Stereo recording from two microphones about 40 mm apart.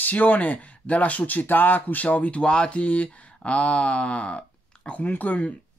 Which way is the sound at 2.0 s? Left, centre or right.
Left.